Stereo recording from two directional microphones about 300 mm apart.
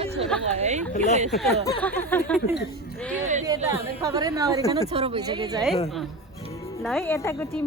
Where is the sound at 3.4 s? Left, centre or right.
Centre.